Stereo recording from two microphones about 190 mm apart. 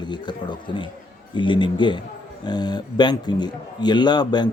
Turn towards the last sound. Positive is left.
turn(degrees=20)  # may be behind; listen again after turning